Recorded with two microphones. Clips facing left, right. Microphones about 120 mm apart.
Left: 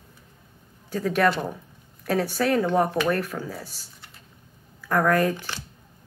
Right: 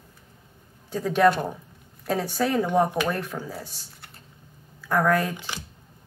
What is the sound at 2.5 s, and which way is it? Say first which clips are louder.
Speech: even; 15° right (ahead or behind).